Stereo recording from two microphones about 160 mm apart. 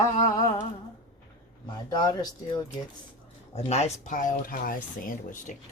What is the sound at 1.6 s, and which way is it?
Speech, 25° left (ahead or behind).